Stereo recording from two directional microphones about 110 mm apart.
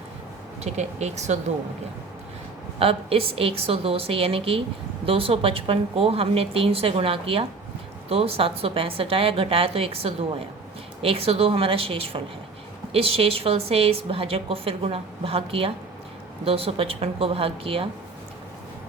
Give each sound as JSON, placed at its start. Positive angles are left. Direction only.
{"t": 0.6, "sound": "speech", "side_deg": -90}
{"t": 2.7, "sound": "a woman's voice", "side_deg": -60}